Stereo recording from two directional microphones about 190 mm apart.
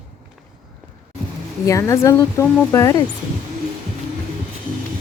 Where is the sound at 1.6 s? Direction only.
15° left (ahead or behind).